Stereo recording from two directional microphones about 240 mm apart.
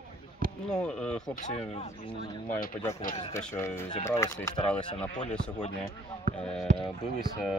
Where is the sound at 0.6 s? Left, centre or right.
Centre.